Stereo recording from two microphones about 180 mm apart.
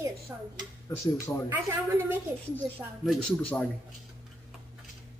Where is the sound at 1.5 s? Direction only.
10° right (ahead or behind).